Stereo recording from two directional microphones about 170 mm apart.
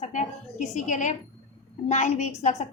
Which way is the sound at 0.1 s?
45° left (ahead or behind).